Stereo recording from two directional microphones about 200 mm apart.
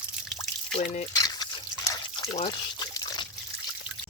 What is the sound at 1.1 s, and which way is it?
Trickle, 20° left (ahead or behind).